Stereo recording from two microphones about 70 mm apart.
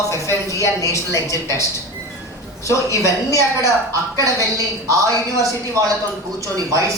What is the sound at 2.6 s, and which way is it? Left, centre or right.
Speech, left.